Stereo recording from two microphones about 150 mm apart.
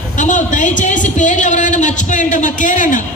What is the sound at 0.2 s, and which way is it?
A man's voice, 55° left (ahead or behind).